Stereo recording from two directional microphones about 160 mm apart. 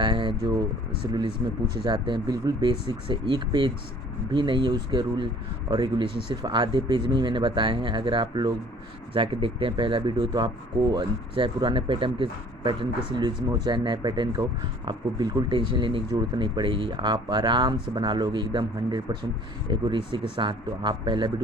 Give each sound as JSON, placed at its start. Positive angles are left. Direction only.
{"t": 0.0, "sound": "speech", "side_deg": -30}
{"t": 1.8, "sound": "speech", "side_deg": -30}